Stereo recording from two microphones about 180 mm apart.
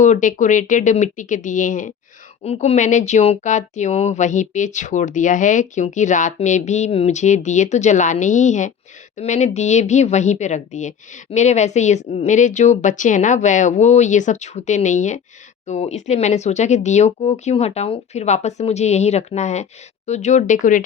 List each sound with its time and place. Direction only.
0.0 s speech: 45° left (ahead or behind)
2.4 s speech: 35° left (ahead or behind)